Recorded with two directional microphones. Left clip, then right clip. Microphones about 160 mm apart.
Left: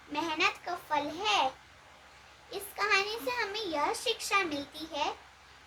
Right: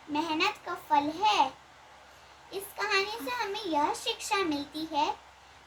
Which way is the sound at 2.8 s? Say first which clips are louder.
Left 1 dB; 25° left (ahead or behind).